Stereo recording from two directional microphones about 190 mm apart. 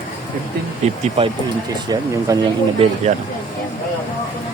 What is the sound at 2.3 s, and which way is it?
Speech, 20° right (ahead or behind).